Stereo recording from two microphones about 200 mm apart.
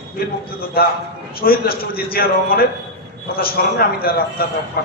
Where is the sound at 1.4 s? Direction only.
50° left (ahead or behind).